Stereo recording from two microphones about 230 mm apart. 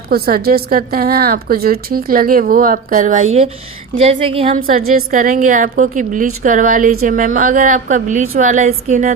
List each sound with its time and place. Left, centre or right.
0.1 s a woman's voice: right
3.9 s speech: right
4.9 s a woman's voice: right